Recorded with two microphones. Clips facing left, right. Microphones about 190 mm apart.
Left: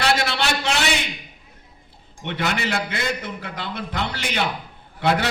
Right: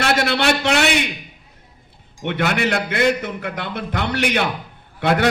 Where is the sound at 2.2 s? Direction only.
60° right (ahead or behind).